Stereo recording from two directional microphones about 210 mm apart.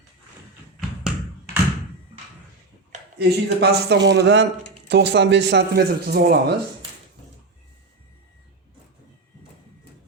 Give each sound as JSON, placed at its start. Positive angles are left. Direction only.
{"t": 3.2, "sound": "speech", "side_deg": -50}